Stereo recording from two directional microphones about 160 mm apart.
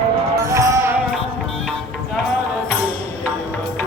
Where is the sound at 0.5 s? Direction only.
15° right (ahead or behind).